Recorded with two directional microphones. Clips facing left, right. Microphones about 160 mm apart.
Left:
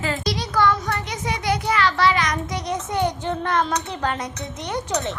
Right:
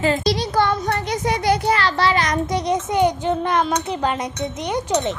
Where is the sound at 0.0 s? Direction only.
25° right (ahead or behind).